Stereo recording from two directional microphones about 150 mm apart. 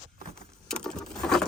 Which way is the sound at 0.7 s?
5° left (ahead or behind).